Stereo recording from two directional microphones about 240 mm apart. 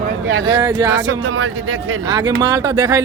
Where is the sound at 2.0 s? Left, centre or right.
Centre.